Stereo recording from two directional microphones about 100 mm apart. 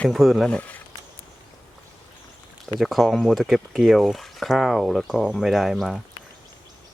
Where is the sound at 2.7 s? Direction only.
Centre (ahead or behind).